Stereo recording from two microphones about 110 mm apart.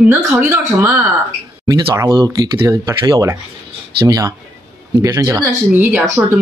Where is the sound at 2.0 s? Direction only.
35° right (ahead or behind).